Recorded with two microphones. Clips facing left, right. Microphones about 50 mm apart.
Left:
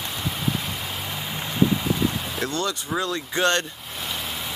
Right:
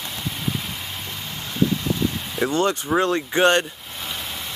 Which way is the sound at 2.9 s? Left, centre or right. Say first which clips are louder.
Right 6 dB; right.